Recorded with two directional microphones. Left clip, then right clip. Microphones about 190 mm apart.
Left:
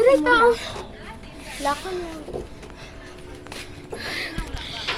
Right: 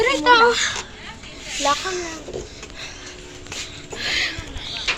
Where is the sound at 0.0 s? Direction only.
35° right (ahead or behind).